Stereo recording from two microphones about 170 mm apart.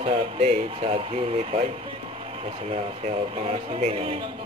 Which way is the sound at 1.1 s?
35° right (ahead or behind).